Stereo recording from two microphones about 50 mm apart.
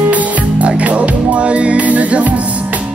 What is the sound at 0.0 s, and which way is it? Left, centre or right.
Music, right.